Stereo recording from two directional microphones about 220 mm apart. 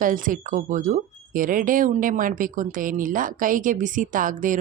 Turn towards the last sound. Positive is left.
turn(degrees=-35)  # may be behind; listen again after turning